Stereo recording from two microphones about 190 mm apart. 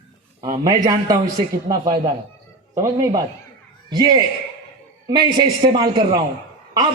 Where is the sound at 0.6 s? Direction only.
20° right (ahead or behind).